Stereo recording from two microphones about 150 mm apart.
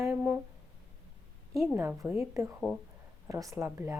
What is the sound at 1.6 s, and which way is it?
Speech, 15° right (ahead or behind).